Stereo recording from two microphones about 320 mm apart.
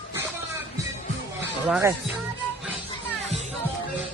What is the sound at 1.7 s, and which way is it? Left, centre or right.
Speech, centre.